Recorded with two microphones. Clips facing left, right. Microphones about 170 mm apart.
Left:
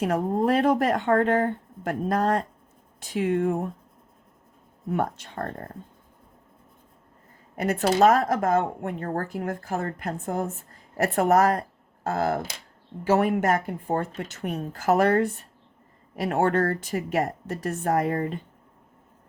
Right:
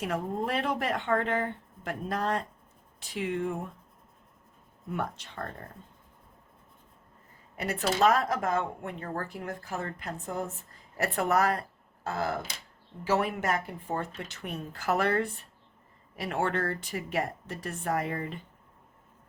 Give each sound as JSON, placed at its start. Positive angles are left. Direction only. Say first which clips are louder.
{"t": 0.0, "sound": "speech", "louder": "left 8 dB", "side_deg": 45}
{"t": 4.9, "sound": "speech", "louder": "left 7 dB", "side_deg": 45}
{"t": 7.5, "sound": "speech", "louder": "left 7 dB", "side_deg": 50}